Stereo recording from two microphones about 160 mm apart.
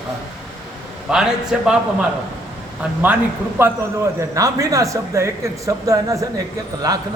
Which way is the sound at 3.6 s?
15° right (ahead or behind).